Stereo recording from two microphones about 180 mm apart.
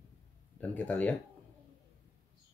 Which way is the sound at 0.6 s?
10° left (ahead or behind).